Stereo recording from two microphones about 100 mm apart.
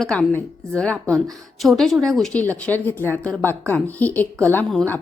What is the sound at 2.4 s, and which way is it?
A woman's voice, 15° left (ahead or behind).